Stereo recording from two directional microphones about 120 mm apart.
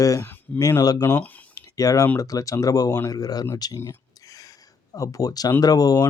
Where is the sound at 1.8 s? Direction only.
30° left (ahead or behind).